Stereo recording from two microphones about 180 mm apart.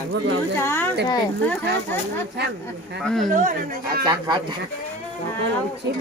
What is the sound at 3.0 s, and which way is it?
Speech, centre (ahead or behind).